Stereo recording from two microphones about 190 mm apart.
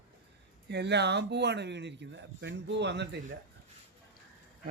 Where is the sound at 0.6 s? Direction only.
65° right (ahead or behind).